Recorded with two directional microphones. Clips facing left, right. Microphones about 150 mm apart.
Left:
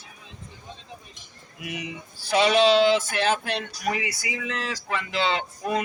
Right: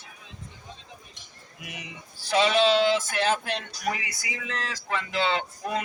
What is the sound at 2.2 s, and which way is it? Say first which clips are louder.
Speech: left 2 dB; 15° left (ahead or behind).